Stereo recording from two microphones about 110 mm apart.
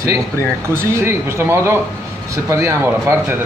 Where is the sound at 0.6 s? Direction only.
25° right (ahead or behind).